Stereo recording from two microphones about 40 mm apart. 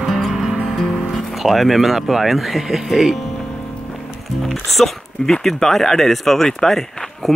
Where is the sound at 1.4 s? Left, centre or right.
Centre.